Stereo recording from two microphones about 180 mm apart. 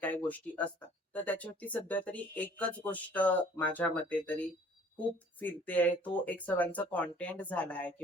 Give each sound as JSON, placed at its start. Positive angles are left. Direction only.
{"t": 0.0, "sound": "speech", "side_deg": 10}